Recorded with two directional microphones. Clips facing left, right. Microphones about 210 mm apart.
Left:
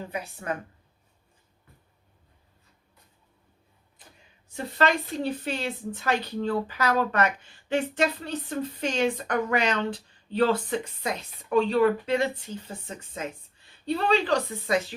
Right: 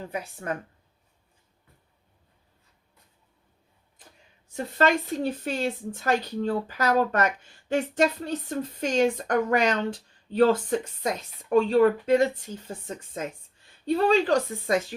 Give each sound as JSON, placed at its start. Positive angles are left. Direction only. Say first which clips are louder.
{"t": 0.4, "sound": "speech", "louder": "even", "side_deg": -40}
{"t": 4.5, "sound": "a woman's voice", "louder": "right 2 dB", "side_deg": -45}
{"t": 13.8, "sound": "a woman's voice", "louder": "right 3 dB", "side_deg": -45}